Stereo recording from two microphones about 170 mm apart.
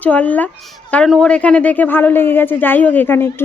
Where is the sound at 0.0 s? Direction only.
10° left (ahead or behind).